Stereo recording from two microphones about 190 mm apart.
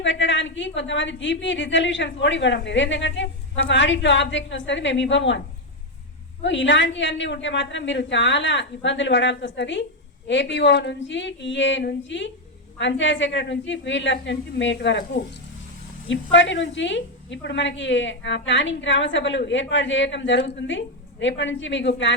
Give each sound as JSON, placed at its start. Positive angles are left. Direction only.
{"t": 0.0, "sound": "a woman's voice", "side_deg": 75}
{"t": 6.4, "sound": "a woman's voice", "side_deg": 75}
{"t": 16.0, "sound": "a woman's voice", "side_deg": 75}